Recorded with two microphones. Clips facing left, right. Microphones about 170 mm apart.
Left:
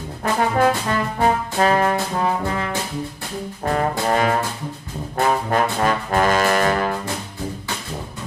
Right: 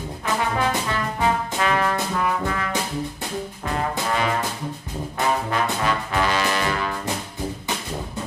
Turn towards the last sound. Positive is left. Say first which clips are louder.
# left 5 dB
turn(degrees=45)  # may be behind; listen again after turning